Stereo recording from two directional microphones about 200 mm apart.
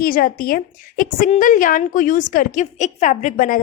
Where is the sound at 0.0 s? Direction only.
45° left (ahead or behind).